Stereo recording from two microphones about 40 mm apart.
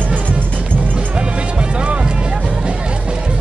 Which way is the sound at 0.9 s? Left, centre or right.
Right.